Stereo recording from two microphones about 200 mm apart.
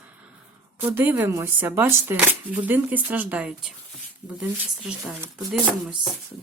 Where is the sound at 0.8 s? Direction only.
10° right (ahead or behind).